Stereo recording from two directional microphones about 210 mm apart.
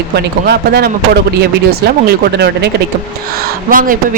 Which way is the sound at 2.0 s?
55° right (ahead or behind).